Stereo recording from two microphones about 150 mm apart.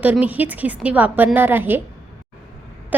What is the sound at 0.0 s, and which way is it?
A woman's voice, 10° right (ahead or behind).